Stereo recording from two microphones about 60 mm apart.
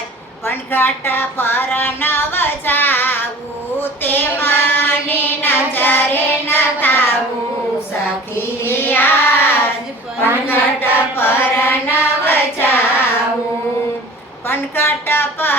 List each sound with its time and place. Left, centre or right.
0.4 s speech: left
3.8 s child singing: left
8.4 s child singing: left
10.2 s chant: left
14.4 s a sound: left